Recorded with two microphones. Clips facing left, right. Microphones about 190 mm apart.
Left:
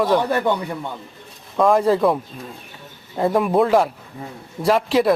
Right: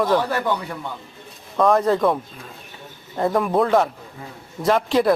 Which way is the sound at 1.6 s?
Centre (ahead or behind).